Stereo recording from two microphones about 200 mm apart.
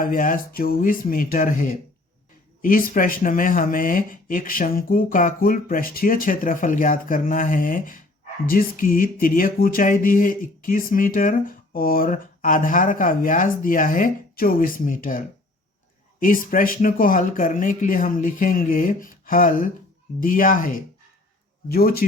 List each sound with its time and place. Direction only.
0.0 s speech: 45° left (ahead or behind)
16.2 s speech: 45° left (ahead or behind)